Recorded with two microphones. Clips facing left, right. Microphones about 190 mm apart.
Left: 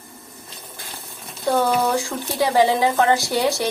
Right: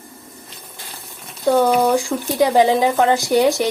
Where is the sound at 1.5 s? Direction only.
15° right (ahead or behind).